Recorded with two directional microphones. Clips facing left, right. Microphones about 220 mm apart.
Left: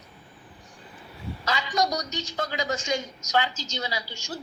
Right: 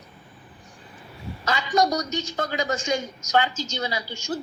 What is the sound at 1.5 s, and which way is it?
A woman's voice, 55° right (ahead or behind).